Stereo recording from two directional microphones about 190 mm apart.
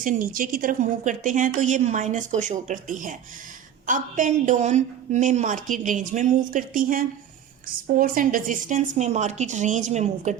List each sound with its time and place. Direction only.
0.0 s a woman's voice: 45° right (ahead or behind)